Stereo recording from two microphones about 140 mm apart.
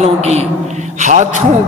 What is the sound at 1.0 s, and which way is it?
Speech, 60° right (ahead or behind).